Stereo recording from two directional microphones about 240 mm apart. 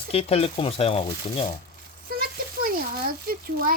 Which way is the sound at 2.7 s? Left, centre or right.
Right.